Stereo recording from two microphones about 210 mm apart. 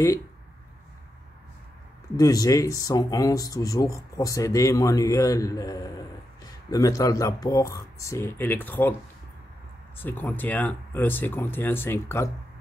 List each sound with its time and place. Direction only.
2.1 s speech: 15° left (ahead or behind)
10.0 s speech: 10° left (ahead or behind)